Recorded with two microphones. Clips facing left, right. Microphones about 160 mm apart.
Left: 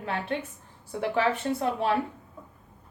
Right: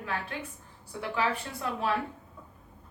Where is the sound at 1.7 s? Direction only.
30° left (ahead or behind).